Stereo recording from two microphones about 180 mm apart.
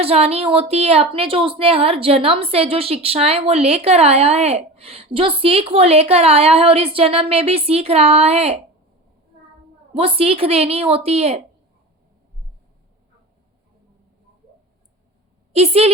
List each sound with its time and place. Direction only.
0.0 s a woman's voice: 35° right (ahead or behind)
9.9 s a woman's voice: 30° right (ahead or behind)
15.5 s a woman's voice: 35° right (ahead or behind)